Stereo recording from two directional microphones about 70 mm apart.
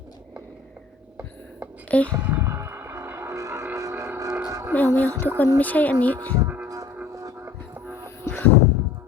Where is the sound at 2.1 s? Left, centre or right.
Right.